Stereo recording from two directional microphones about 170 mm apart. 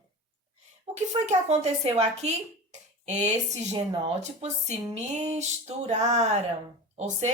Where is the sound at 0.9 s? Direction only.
40° right (ahead or behind).